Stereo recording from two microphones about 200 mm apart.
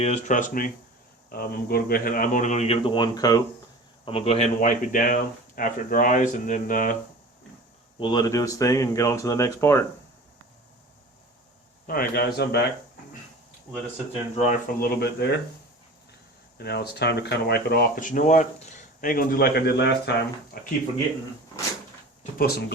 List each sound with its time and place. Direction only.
0.0 s speech: 35° left (ahead or behind); by 3.4 s 20° left (ahead or behind)
4.0 s speech: 30° left (ahead or behind)
7.9 s speech: 20° left (ahead or behind)
11.9 s speech: 50° left (ahead or behind)
14.3 s speech: 40° left (ahead or behind)
16.6 s speech: 55° left (ahead or behind)
22.2 s a sound: 50° left (ahead or behind)